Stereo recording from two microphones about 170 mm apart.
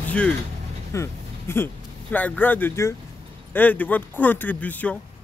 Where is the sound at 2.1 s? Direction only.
10° left (ahead or behind).